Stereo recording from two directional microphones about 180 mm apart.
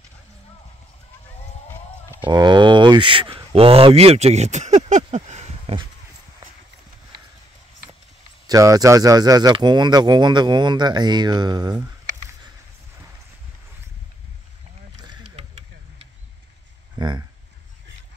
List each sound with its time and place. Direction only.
2.1 s speech: 25° right (ahead or behind)
8.5 s speech: 20° right (ahead or behind)